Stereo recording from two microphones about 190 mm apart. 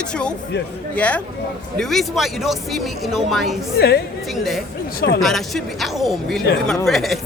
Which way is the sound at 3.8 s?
55° left (ahead or behind).